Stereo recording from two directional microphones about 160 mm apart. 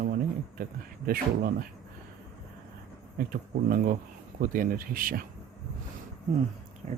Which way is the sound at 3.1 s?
65° right (ahead or behind).